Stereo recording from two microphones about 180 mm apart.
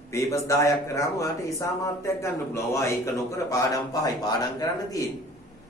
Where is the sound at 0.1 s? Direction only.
15° left (ahead or behind).